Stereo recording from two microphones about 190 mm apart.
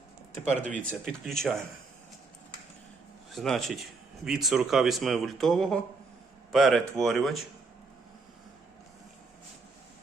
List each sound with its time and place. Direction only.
0.6 s speech: 40° right (ahead or behind)
0.9 s speech: centre (ahead or behind)
3.3 s speech: centre (ahead or behind)